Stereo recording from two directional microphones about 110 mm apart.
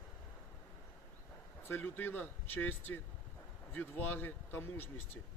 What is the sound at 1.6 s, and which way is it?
A man's voice, 20° left (ahead or behind).